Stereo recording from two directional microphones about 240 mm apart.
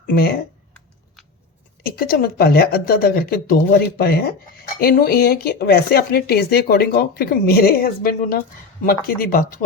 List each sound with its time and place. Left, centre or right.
0.1 s speech: left
1.8 s speech: left